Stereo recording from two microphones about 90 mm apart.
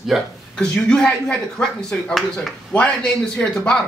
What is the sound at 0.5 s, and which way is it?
Speech, 10° left (ahead or behind).